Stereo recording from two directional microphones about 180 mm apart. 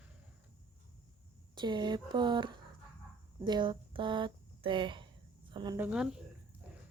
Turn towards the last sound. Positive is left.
turn(degrees=-5)  # may be behind; listen again after turning